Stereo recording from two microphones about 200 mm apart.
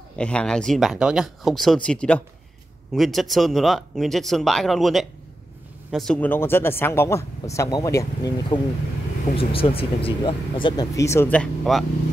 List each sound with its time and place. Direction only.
0.2 s speech: 5° left (ahead or behind)
9.4 s speech: 30° left (ahead or behind); by 11.8 s 5° left (ahead or behind)